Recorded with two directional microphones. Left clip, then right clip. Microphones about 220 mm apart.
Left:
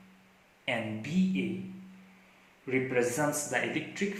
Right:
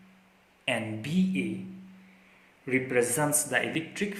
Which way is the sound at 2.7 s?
40° right (ahead or behind).